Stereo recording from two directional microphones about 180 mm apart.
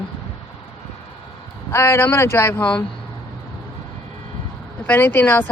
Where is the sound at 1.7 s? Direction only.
15° left (ahead or behind).